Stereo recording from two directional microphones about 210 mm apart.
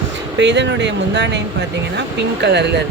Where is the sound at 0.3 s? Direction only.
55° right (ahead or behind).